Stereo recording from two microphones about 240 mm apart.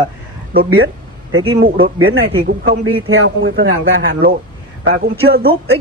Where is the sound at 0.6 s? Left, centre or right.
Right.